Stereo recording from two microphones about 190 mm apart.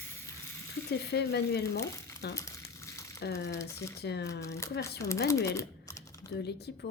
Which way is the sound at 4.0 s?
60° left (ahead or behind).